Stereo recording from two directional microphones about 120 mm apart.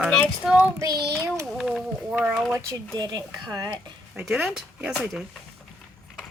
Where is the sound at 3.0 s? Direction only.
35° right (ahead or behind).